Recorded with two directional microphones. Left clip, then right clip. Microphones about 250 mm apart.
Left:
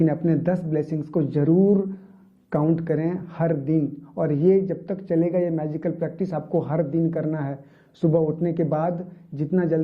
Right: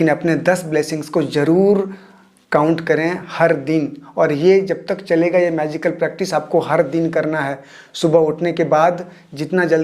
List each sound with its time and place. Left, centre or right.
0.0 s speech: centre